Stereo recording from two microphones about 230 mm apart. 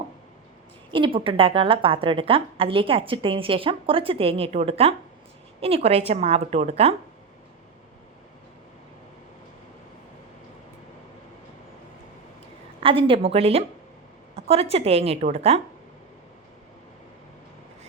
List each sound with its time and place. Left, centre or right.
0.9 s a woman's voice: right
12.8 s a woman's voice: right